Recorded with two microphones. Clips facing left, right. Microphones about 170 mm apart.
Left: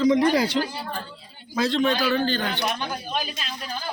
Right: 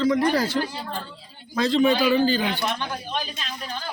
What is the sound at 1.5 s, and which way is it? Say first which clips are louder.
A man's voice: right 3 dB; centre (ahead or behind).